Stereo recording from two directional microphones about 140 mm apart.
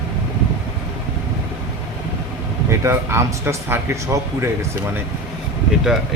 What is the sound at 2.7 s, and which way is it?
Speech, 20° right (ahead or behind).